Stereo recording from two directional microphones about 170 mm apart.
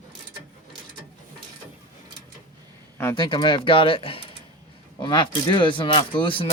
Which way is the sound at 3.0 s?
15° left (ahead or behind).